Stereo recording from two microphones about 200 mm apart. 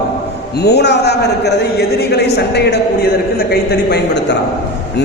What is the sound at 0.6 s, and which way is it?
A man's voice, 55° left (ahead or behind).